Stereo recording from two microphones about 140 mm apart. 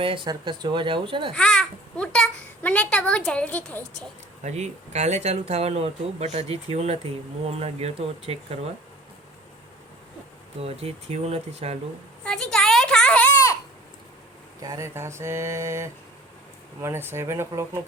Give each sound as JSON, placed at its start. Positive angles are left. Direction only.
{"t": 0.0, "sound": "speech", "side_deg": -40}
{"t": 1.3, "sound": "a child's voice", "side_deg": 5}
{"t": 4.4, "sound": "speech", "side_deg": -55}
{"t": 10.6, "sound": "speech", "side_deg": -45}
{"t": 12.2, "sound": "a sound", "side_deg": 5}
{"t": 14.6, "sound": "speech", "side_deg": -25}